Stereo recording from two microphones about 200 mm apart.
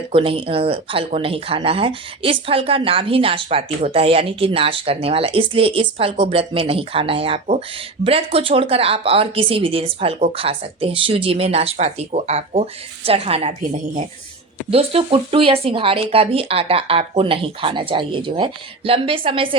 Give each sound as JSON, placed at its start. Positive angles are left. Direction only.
{"t": 0.1, "sound": "speech", "side_deg": -25}